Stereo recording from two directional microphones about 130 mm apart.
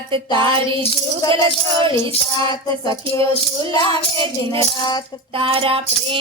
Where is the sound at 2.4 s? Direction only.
30° left (ahead or behind).